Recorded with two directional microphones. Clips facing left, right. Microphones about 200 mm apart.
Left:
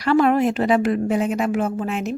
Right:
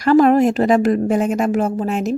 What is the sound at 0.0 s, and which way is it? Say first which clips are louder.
Speech: right 5 dB; 40° right (ahead or behind).